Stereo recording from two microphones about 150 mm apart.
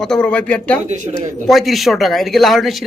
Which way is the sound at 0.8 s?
55° right (ahead or behind).